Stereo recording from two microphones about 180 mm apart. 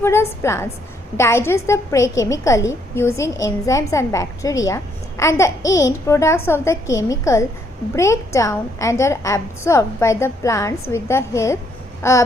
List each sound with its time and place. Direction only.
0.0 s a woman's voice: 15° left (ahead or behind)